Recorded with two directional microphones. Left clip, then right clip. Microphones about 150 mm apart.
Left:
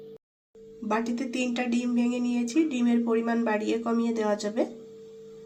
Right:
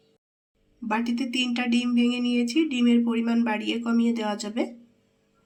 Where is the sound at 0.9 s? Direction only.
5° left (ahead or behind).